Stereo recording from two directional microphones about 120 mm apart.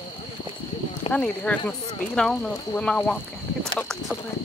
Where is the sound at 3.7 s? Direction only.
5° left (ahead or behind).